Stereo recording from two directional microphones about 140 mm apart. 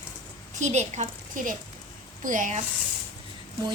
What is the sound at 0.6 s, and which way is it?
A woman's voice, 55° right (ahead or behind).